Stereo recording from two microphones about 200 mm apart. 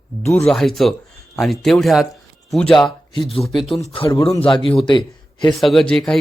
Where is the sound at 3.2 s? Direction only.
30° left (ahead or behind).